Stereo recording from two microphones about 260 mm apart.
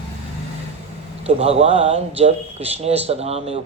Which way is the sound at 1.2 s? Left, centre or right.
Right.